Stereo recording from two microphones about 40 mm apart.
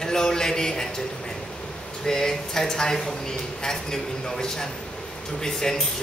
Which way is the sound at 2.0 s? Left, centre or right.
Centre.